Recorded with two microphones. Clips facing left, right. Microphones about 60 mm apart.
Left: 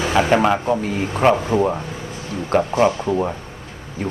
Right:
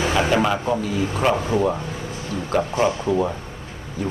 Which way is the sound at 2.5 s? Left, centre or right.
Left.